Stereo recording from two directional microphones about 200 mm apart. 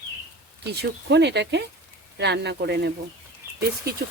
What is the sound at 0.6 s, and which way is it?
Speech, 55° right (ahead or behind).